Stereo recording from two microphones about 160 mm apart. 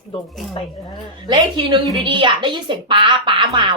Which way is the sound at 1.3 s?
25° right (ahead or behind).